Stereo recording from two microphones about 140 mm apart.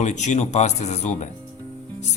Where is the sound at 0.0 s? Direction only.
55° left (ahead or behind).